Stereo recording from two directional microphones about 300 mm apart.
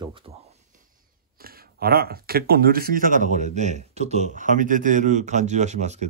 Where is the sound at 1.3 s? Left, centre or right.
Right.